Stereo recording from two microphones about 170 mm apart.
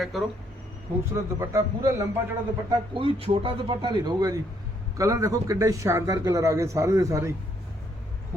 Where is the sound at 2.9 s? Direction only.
35° right (ahead or behind).